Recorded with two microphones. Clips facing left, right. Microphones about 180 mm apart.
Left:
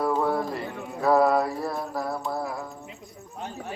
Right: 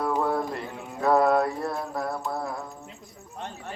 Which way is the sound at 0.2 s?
Centre (ahead or behind).